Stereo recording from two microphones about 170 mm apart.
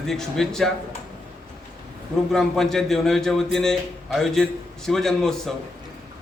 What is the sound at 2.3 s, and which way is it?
A man's voice, centre (ahead or behind).